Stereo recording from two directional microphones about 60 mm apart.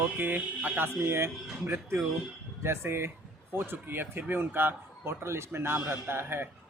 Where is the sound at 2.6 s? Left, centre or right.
Right.